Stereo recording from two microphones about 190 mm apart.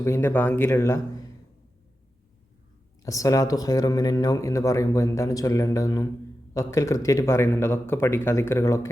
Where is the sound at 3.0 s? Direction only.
15° left (ahead or behind).